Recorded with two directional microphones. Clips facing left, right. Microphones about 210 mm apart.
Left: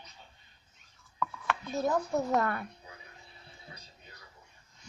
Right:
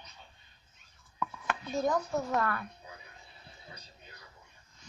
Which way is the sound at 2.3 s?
25° left (ahead or behind).